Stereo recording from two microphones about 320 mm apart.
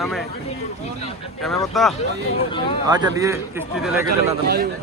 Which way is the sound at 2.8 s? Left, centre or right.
Centre.